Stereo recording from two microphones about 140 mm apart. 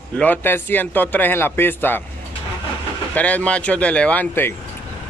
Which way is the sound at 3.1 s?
10° left (ahead or behind).